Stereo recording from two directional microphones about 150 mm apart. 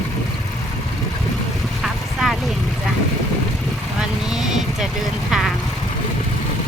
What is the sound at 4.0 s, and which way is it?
Vehicle, 5° right (ahead or behind).